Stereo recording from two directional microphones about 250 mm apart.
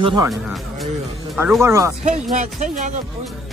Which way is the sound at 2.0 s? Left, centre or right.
Right.